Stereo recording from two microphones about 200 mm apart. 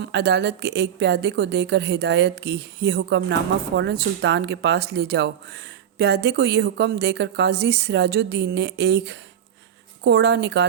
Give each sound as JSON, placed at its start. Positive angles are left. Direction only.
{"t": 0.0, "sound": "a woman's voice", "side_deg": -60}